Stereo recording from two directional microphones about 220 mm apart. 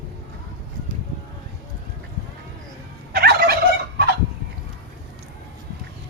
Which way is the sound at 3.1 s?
45° right (ahead or behind).